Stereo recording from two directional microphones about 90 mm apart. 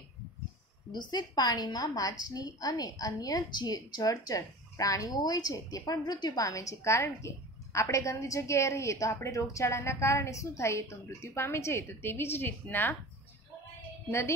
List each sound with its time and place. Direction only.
0.9 s a woman's voice: 50° left (ahead or behind)
6.4 s a woman's voice: 40° left (ahead or behind); by 12.9 s 25° left (ahead or behind)